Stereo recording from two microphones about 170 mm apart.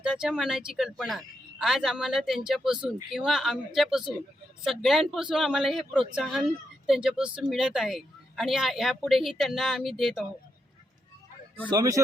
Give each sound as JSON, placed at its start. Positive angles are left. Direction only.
{"t": 0.0, "sound": "speech", "side_deg": -5}
{"t": 11.7, "sound": "speech", "side_deg": -20}